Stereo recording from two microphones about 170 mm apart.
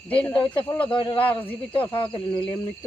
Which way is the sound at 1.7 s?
30° left (ahead or behind).